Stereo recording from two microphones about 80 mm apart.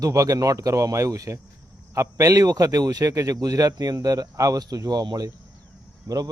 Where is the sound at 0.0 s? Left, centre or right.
Right.